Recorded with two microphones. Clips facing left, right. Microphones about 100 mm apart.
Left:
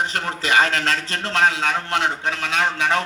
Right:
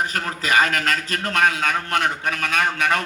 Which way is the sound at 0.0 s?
25° left (ahead or behind).